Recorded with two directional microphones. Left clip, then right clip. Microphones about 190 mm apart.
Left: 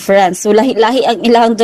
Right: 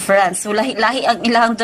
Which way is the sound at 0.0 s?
35° left (ahead or behind).